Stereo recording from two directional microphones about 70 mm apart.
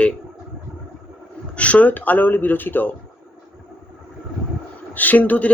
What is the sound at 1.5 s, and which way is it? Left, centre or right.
Speech, left.